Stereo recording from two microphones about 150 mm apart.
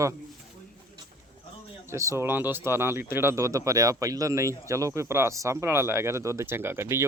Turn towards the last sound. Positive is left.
turn(degrees=-15)  # may be behind; listen again after turning